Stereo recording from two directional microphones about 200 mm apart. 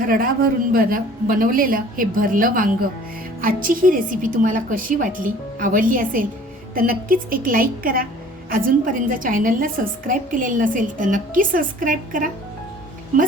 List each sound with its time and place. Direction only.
0.0 s a woman's voice: 45° right (ahead or behind)